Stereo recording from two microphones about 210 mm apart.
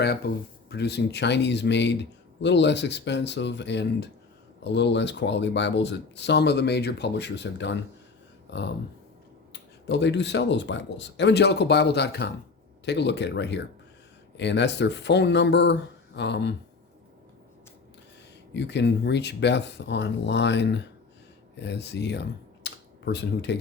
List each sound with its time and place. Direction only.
0.2 s a man's voice: 50° left (ahead or behind)
18.5 s a man's voice: 55° left (ahead or behind)